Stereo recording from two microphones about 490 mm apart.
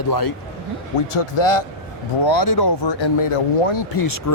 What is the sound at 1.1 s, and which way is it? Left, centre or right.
Speech, left.